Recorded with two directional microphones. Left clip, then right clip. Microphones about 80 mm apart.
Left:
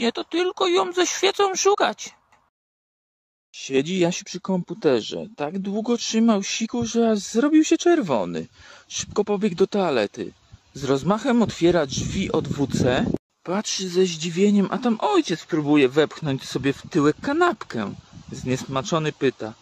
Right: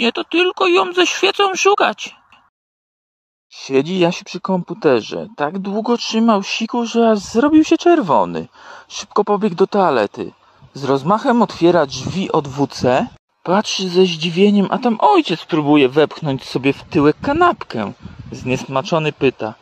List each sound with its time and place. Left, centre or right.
0.0 s speech: right
3.5 s speech: right
13.4 s speech: right
14.7 s speech: right
15.7 s speech: right